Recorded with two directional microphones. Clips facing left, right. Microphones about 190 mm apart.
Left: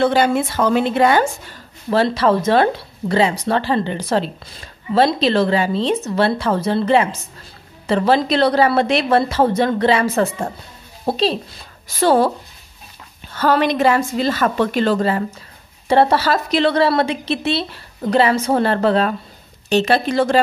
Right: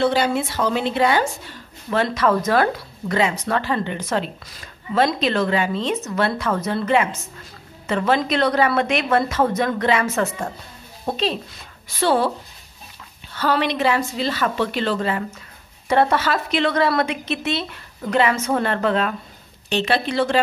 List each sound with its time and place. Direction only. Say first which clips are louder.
0.0 s a woman's voice: left 4 dB; 50° left (ahead or behind)
1.9 s speech: left 4 dB; 30° left (ahead or behind)
13.3 s a woman's voice: left 4 dB; 45° left (ahead or behind)